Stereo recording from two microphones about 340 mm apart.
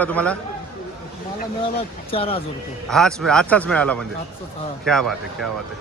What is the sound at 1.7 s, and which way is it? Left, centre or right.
Speech, centre.